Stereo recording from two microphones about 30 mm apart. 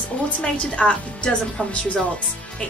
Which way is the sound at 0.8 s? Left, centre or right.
Left.